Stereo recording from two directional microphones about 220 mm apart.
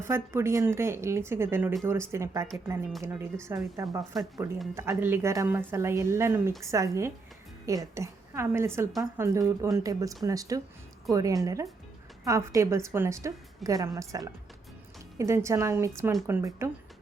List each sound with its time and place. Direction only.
0.0 s a woman's voice: 10° right (ahead or behind)